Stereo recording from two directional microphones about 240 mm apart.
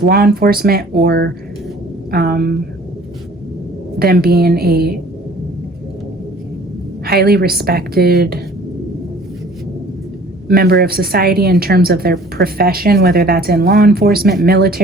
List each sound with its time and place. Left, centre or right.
0.0 s a woman's voice: right
3.9 s a woman's voice: right
7.0 s a woman's voice: right
10.5 s a woman's voice: right